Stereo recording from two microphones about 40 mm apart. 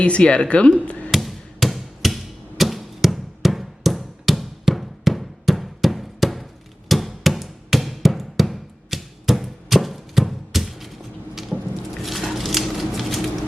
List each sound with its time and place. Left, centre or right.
0.0 s speech: left
1.1 s hammer: centre
11.5 s a sound: centre